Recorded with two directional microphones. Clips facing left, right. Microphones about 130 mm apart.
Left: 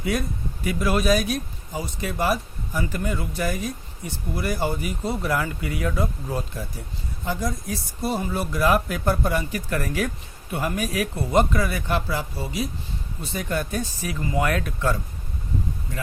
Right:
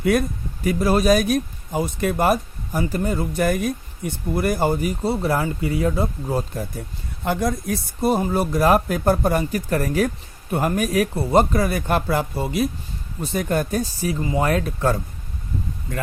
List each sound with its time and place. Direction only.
0.0 s speech: 55° right (ahead or behind); by 6.4 s 30° right (ahead or behind)
6.5 s speech: 45° right (ahead or behind)
7.3 s speech: 60° right (ahead or behind)
13.3 s speech: 45° right (ahead or behind)